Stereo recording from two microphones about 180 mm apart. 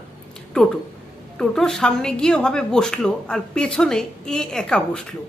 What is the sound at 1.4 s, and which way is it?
Speech, 5° left (ahead or behind).